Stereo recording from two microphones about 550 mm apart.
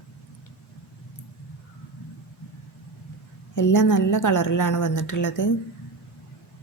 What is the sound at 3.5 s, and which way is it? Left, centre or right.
A woman's voice, left.